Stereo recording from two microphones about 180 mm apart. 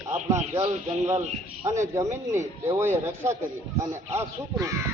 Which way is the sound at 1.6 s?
15° right (ahead or behind).